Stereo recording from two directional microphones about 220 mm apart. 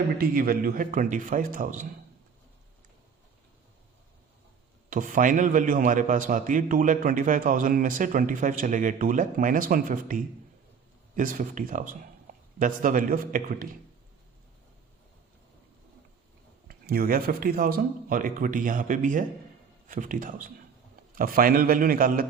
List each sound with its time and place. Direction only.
0.2 s a man's voice: 40° right (ahead or behind)
4.9 s a man's voice: 40° right (ahead or behind)
16.6 s a man's voice: 45° right (ahead or behind)